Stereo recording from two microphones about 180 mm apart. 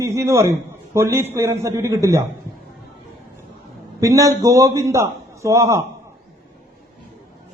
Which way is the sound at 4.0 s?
20° right (ahead or behind).